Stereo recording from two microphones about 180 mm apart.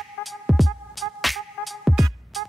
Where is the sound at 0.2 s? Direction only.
Centre (ahead or behind).